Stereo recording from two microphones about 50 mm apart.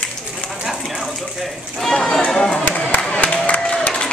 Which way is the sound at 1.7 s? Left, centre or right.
Centre.